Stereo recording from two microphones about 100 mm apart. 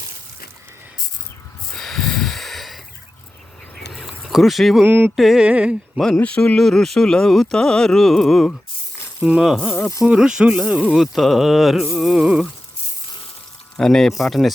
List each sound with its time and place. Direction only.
1.7 s snort: 5° left (ahead or behind)
3.9 s a sound: centre (ahead or behind)
4.9 s music: 20° right (ahead or behind)
5.1 s speech: centre (ahead or behind)
5.5 s speech: 10° right (ahead or behind)
6.1 s speech: 15° left (ahead or behind); by 10.8 s 15° right (ahead or behind)
10.9 s speech: centre (ahead or behind)
13.7 s speech: 5° left (ahead or behind)